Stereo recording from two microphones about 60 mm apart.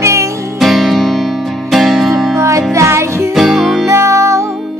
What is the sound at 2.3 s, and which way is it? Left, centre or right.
Music, right.